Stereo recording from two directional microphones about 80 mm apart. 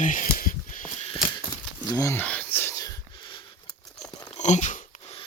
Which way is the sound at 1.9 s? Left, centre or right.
Left.